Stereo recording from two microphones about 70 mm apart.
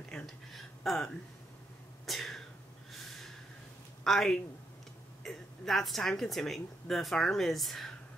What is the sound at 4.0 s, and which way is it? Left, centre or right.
Speech, centre.